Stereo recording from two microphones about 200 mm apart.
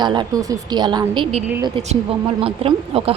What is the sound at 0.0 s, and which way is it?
A woman's voice, 20° right (ahead or behind).